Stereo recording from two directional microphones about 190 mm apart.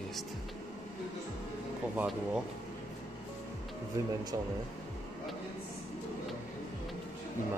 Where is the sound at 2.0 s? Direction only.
5° right (ahead or behind).